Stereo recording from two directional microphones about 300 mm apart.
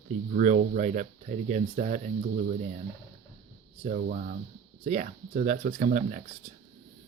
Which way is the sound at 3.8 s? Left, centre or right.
Right.